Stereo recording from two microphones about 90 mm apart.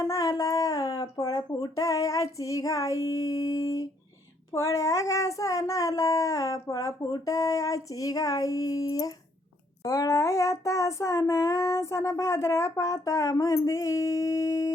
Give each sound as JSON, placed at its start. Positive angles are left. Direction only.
{"t": 0.0, "sound": "child singing", "side_deg": 40}